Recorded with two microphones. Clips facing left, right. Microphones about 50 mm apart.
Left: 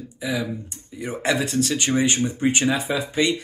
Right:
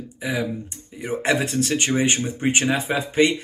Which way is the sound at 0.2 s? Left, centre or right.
Right.